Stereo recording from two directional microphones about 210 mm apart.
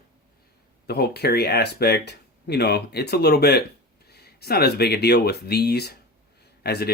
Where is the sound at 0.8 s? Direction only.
50° left (ahead or behind).